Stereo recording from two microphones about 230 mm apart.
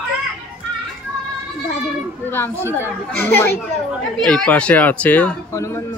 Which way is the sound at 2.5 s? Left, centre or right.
Centre.